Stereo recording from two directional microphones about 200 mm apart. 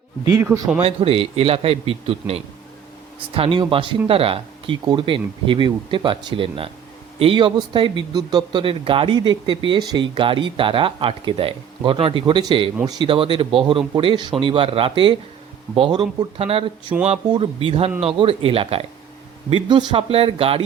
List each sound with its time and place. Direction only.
0.3 s speech: 15° right (ahead or behind)
0.8 s speech: 30° right (ahead or behind)